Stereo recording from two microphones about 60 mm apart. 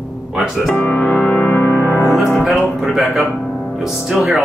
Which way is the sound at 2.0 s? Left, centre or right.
Centre.